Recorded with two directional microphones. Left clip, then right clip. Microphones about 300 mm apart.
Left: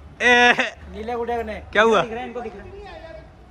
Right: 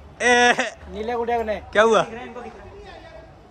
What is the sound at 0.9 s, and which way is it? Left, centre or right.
Speech, right.